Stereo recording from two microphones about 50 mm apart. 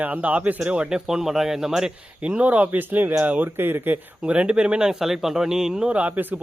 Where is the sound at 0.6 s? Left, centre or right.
Centre.